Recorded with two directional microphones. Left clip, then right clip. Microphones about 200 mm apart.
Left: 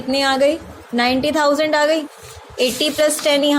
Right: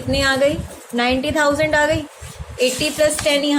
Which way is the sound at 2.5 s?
25° left (ahead or behind).